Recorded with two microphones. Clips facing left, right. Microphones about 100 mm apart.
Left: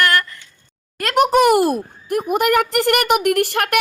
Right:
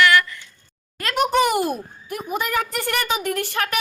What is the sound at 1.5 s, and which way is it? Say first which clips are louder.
Speech: left 7 dB; 60° left (ahead or behind).